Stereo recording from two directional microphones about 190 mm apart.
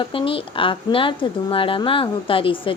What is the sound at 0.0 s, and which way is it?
A woman's voice, 25° left (ahead or behind).